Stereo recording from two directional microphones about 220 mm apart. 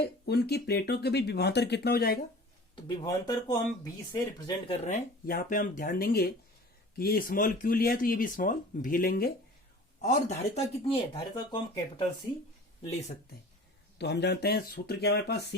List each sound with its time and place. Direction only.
0.0 s speech: 45° left (ahead or behind)
2.7 s speech: 20° left (ahead or behind); by 9.3 s 45° left (ahead or behind)
10.0 s speech: 30° left (ahead or behind)
14.0 s speech: 50° left (ahead or behind)